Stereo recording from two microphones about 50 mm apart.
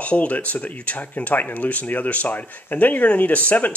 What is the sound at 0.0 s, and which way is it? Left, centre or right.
Speech, left.